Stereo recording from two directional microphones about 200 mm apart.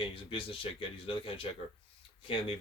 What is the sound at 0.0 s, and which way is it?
Speech, 25° left (ahead or behind).